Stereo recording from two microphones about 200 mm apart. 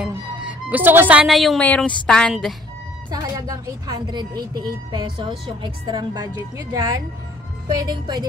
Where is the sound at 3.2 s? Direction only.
15° right (ahead or behind).